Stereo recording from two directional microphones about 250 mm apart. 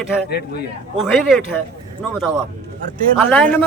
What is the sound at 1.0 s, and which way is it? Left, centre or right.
Speech, centre.